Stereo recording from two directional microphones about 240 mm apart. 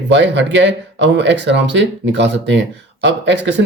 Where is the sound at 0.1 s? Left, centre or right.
Right.